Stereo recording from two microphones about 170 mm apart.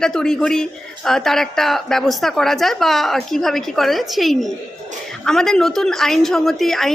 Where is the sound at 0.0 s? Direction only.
5° left (ahead or behind).